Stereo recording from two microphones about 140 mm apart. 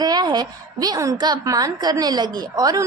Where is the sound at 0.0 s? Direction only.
30° right (ahead or behind).